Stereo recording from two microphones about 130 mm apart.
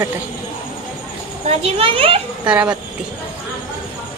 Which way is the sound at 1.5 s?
45° right (ahead or behind).